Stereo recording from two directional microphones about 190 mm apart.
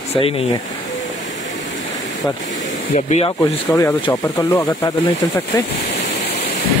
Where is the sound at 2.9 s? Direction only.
35° left (ahead or behind).